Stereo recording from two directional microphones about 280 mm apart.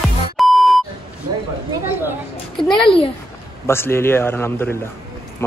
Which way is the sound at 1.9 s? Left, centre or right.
Centre.